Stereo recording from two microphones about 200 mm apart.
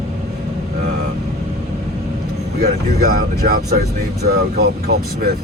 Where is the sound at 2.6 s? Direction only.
50° right (ahead or behind).